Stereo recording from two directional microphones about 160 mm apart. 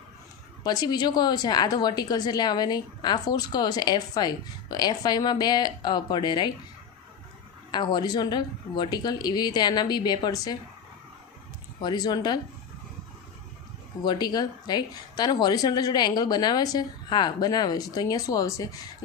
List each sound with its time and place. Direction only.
0.6 s a woman's voice: 25° left (ahead or behind)
7.7 s a woman's voice: 30° left (ahead or behind)
11.8 s a woman's voice: 25° left (ahead or behind)
14.0 s a woman's voice: 25° left (ahead or behind)